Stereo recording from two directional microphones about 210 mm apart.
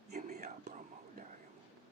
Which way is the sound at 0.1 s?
35° right (ahead or behind).